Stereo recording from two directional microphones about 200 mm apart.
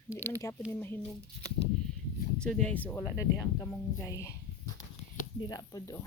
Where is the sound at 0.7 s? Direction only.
10° left (ahead or behind).